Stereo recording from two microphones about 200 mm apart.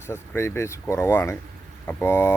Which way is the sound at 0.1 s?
15° left (ahead or behind).